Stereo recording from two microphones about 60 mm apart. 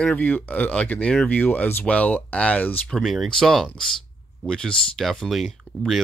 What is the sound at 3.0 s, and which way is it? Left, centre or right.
Speech, centre.